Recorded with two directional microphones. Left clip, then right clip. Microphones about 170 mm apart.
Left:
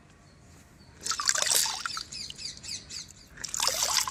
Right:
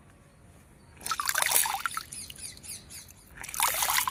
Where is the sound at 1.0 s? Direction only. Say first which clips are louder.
Even; 20° right (ahead or behind).